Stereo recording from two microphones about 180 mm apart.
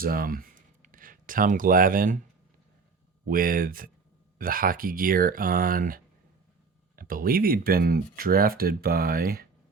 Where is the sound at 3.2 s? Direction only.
50° right (ahead or behind).